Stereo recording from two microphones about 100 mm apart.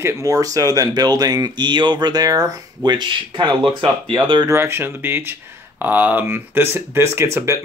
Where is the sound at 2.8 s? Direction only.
50° right (ahead or behind).